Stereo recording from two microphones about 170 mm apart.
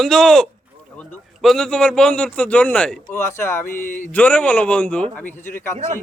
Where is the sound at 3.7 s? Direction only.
50° left (ahead or behind).